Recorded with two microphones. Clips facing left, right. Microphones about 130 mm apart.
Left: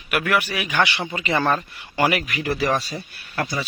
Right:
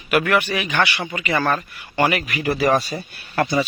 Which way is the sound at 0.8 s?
25° left (ahead or behind).